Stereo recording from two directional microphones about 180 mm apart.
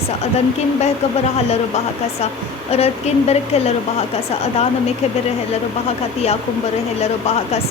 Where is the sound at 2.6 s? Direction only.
35° left (ahead or behind).